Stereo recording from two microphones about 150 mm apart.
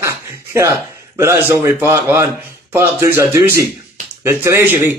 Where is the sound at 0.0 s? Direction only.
20° right (ahead or behind).